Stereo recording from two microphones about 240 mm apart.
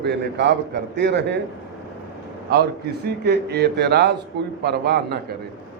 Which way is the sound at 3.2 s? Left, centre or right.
Right.